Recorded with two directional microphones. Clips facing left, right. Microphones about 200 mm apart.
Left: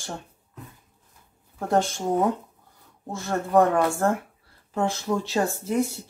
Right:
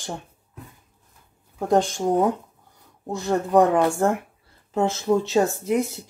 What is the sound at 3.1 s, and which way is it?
Speech, 15° right (ahead or behind).